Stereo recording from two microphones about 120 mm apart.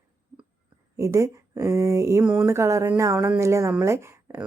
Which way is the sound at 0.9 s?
25° right (ahead or behind).